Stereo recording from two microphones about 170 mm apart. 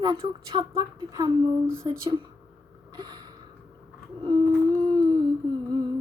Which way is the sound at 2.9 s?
25° right (ahead or behind).